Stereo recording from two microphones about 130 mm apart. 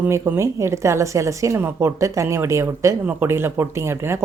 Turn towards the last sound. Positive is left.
turn(degrees=-20)  # may be behind; listen again after turning